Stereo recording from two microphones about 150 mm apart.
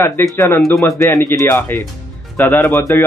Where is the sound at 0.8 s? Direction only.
20° left (ahead or behind).